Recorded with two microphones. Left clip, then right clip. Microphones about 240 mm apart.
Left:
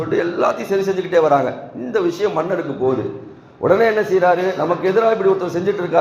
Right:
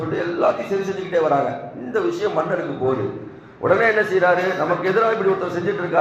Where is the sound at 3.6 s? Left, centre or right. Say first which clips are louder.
Left 2 dB; left.